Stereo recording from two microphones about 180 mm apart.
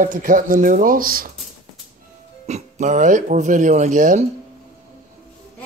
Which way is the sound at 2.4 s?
40° right (ahead or behind).